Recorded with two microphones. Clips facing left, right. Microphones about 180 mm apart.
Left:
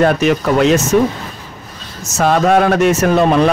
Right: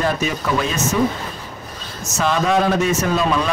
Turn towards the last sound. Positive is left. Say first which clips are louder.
# left 7 dB
turn(degrees=60)  # may be behind; listen again after turning